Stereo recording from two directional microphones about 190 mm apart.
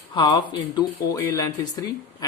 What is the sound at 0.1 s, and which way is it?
Speech, 25° left (ahead or behind).